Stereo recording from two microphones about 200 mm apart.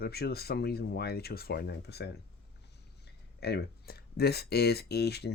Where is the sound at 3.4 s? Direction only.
50° left (ahead or behind).